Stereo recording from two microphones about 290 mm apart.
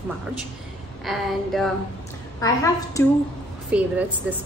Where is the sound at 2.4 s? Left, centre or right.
Centre.